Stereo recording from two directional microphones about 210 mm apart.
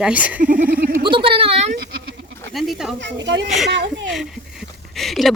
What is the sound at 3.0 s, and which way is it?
Speech, 55° right (ahead or behind).